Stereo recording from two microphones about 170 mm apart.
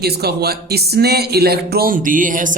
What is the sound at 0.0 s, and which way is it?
Speech, 70° right (ahead or behind).